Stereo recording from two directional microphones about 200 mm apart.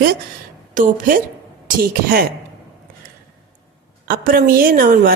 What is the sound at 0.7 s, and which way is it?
Speech, 40° right (ahead or behind).